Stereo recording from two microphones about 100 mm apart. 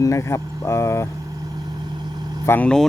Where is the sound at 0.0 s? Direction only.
30° left (ahead or behind).